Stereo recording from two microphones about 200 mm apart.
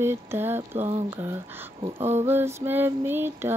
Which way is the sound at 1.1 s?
10° right (ahead or behind).